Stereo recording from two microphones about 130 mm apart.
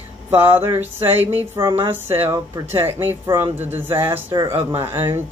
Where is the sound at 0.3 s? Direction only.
15° right (ahead or behind).